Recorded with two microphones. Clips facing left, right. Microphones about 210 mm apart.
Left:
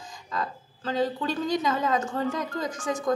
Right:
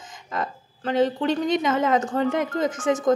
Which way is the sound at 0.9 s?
20° right (ahead or behind).